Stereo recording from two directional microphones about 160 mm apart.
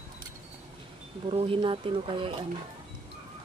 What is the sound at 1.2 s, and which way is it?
Speech, 35° right (ahead or behind).